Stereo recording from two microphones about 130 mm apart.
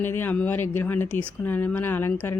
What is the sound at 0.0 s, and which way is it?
Speech, 15° left (ahead or behind).